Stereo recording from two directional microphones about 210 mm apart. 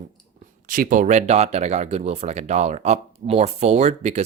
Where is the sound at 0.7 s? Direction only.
40° right (ahead or behind).